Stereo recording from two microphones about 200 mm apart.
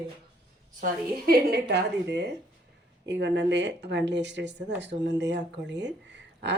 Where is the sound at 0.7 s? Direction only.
45° right (ahead or behind).